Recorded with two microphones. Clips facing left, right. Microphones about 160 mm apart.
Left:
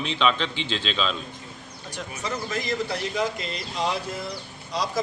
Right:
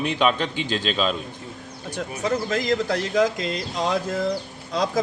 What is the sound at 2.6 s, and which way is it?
Speech, 90° right.